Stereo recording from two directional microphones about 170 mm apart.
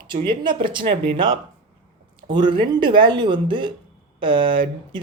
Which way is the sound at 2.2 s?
30° right (ahead or behind).